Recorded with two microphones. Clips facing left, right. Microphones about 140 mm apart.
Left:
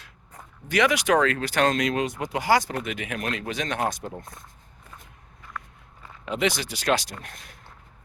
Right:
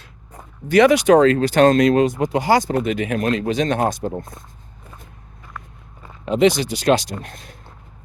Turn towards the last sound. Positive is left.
turn(degrees=-30)  # may be behind; listen again after turning